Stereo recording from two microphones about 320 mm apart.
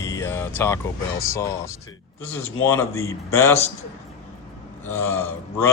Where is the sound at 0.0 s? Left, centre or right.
Centre.